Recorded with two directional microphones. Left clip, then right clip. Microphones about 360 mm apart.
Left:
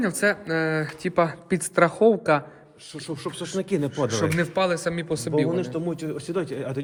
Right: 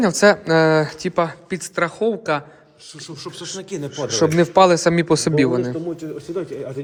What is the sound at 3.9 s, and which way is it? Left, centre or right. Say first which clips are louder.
Speech: right 5 dB; centre.